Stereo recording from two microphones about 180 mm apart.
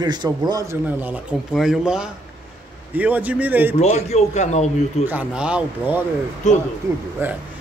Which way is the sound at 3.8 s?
40° left (ahead or behind).